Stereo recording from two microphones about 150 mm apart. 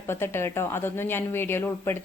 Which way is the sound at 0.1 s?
15° left (ahead or behind).